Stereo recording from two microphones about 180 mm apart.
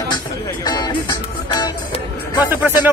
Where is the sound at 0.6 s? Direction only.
25° left (ahead or behind).